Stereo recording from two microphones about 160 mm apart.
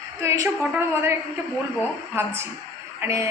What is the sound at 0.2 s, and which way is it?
Speech, 20° right (ahead or behind).